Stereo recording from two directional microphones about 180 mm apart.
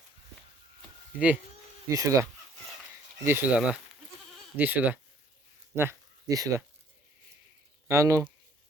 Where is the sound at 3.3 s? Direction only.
10° right (ahead or behind).